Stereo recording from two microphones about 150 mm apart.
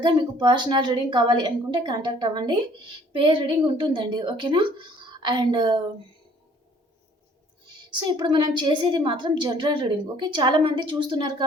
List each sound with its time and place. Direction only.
0.0 s a woman's voice: 30° right (ahead or behind)
7.9 s a woman's voice: 30° right (ahead or behind)